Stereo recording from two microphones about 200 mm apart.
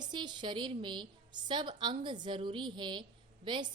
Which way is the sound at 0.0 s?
20° right (ahead or behind).